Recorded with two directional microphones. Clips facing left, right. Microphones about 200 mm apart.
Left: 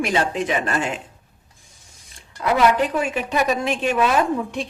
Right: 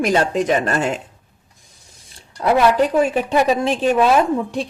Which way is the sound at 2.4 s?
35° right (ahead or behind).